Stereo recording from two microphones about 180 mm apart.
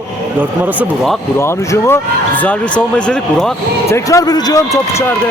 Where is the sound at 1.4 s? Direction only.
15° left (ahead or behind).